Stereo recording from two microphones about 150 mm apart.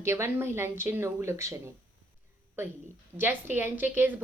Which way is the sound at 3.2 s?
15° right (ahead or behind).